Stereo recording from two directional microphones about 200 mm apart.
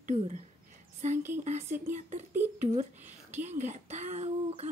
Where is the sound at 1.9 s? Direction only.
35° right (ahead or behind).